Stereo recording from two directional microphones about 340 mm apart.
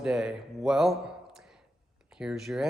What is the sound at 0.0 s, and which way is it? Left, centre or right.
Speech, centre.